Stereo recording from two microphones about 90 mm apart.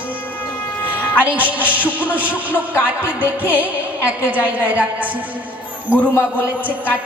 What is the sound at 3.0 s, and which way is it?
Speech, 20° right (ahead or behind).